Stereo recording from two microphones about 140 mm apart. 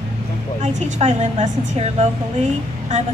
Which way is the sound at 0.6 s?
55° right (ahead or behind).